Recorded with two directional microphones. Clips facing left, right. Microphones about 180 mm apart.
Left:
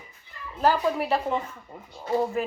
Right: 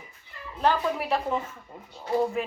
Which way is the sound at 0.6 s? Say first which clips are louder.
Left 2 dB; 5° left (ahead or behind).